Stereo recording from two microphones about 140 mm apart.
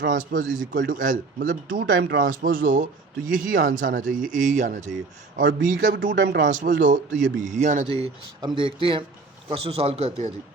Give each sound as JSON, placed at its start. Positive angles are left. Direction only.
{"t": 0.1, "sound": "speech", "side_deg": -70}
{"t": 8.4, "sound": "a man's voice", "side_deg": -35}